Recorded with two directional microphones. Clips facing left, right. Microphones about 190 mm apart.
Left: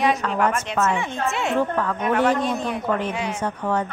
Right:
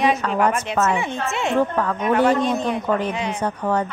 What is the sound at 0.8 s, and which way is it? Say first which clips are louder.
Speech: right 1 dB; 40° right (ahead or behind).